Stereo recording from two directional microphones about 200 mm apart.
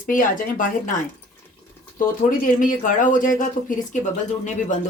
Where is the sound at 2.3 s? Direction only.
40° left (ahead or behind).